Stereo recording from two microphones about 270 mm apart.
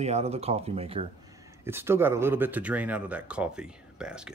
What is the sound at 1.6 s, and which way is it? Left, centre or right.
Speech, centre.